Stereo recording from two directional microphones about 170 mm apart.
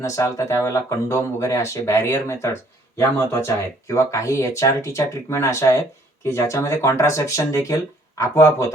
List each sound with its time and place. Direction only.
0.0 s speech: 15° left (ahead or behind)